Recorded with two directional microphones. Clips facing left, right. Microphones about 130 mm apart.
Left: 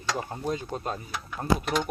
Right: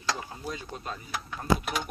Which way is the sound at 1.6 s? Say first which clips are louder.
Left 5 dB; 5° right (ahead or behind).